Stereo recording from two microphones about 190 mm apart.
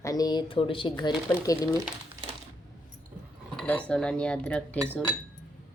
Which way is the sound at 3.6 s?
5° left (ahead or behind).